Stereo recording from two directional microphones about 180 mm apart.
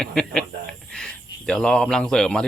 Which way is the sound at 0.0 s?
5° left (ahead or behind).